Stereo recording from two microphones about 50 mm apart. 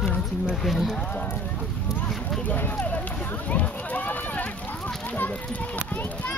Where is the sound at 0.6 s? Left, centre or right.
Centre.